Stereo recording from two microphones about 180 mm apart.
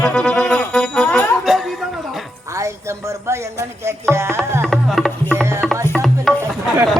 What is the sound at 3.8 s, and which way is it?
Tabla, 15° right (ahead or behind).